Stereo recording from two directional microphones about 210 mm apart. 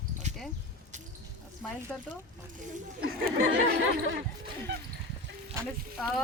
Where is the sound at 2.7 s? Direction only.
50° right (ahead or behind).